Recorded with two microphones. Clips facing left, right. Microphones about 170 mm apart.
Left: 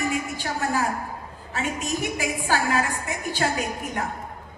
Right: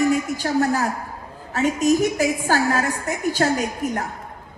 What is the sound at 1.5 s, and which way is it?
A woman's voice, 40° right (ahead or behind).